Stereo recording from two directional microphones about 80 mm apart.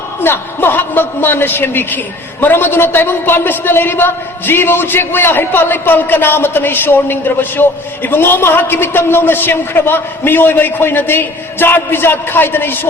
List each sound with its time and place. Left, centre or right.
0.2 s a man's voice: left